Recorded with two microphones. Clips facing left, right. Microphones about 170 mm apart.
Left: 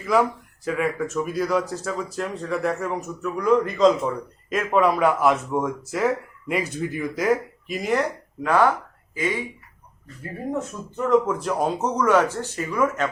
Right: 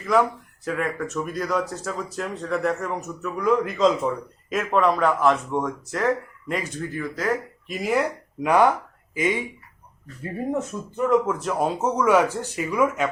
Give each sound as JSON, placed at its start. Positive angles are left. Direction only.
{"t": 0.0, "sound": "speech", "side_deg": 0}
{"t": 7.7, "sound": "speech", "side_deg": -5}
{"t": 8.4, "sound": "speech", "side_deg": -15}
{"t": 10.9, "sound": "speech", "side_deg": 0}